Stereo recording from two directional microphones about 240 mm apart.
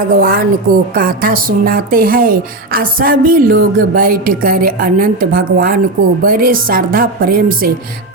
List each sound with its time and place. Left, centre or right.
0.2 s speech: right